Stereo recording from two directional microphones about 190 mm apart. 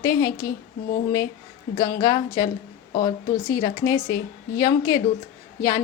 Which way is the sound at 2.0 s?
20° left (ahead or behind).